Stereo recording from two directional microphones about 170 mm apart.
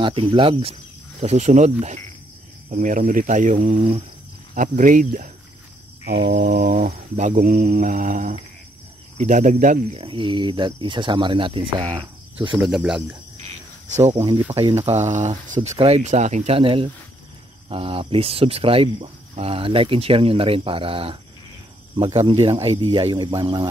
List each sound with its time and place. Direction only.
0.0 s speech: 30° right (ahead or behind)
1.2 s mantra: 45° right (ahead or behind); by 6.9 s 60° right (ahead or behind)
6.9 s mantra: 45° right (ahead or behind)
9.9 s speech: 30° right (ahead or behind)
12.6 s speech: 5° right (ahead or behind)
13.9 s speech: 40° right (ahead or behind)
14.5 s speech: 25° right (ahead or behind)
14.9 s mantra: 45° right (ahead or behind)
15.8 s speech: 40° right (ahead or behind); by 23.7 s 25° right (ahead or behind)